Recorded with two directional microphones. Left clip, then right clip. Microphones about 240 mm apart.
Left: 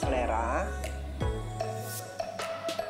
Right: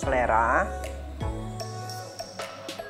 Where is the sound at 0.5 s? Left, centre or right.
Centre.